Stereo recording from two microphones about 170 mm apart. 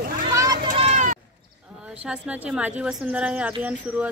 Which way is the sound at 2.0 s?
10° right (ahead or behind).